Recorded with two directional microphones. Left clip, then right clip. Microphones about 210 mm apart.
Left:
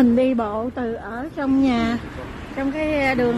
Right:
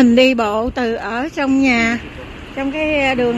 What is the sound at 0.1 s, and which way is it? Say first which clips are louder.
A woman's voice: right 7 dB; 5° right (ahead or behind).